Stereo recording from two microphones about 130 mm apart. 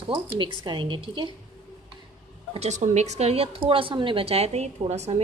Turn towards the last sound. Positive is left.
turn(degrees=-55)  # may be behind; listen again after turning